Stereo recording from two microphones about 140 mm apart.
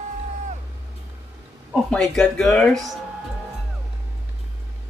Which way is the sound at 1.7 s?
5° left (ahead or behind).